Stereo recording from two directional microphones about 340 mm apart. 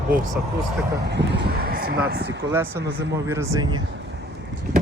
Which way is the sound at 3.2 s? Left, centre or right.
Centre.